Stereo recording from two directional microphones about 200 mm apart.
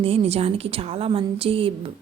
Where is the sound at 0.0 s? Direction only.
30° right (ahead or behind).